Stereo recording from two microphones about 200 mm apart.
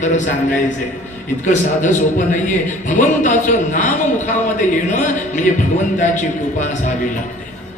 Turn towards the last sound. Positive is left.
turn(degrees=40)  # may be behind; listen again after turning